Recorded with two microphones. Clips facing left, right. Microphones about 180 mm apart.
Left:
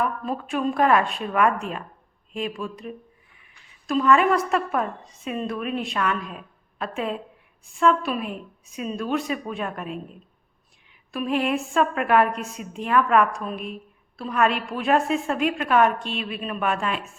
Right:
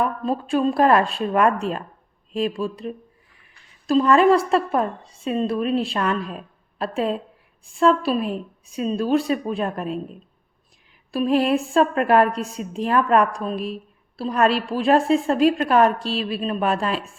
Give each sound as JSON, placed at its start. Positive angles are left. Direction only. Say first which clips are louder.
{"t": 0.0, "sound": "a woman's voice", "louder": "right 4 dB", "side_deg": -30}
{"t": 11.1, "sound": "a woman's voice", "louder": "right 5 dB", "side_deg": -35}